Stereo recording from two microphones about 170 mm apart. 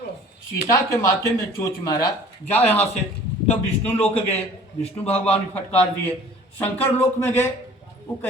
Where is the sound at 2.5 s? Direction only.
10° left (ahead or behind).